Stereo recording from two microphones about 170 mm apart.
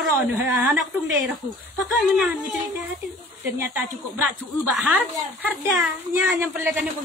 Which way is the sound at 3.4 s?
10° right (ahead or behind).